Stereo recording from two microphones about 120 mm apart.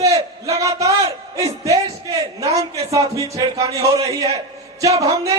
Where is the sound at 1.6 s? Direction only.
30° right (ahead or behind).